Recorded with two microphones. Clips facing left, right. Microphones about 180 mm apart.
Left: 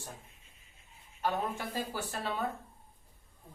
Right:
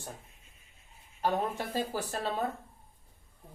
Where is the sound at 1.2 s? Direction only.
40° right (ahead or behind).